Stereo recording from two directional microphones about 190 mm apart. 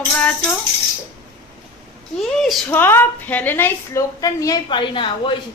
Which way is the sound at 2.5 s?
Centre (ahead or behind).